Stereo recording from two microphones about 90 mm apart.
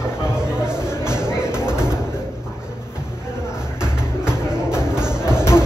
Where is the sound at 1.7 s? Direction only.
10° right (ahead or behind).